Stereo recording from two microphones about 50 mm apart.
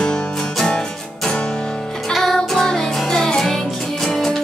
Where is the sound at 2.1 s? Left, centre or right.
Centre.